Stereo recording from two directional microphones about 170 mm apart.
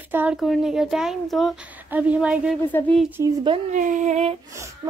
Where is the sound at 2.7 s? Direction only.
10° left (ahead or behind).